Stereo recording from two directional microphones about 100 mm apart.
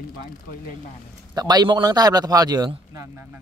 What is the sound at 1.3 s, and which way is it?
A man's voice, 45° right (ahead or behind).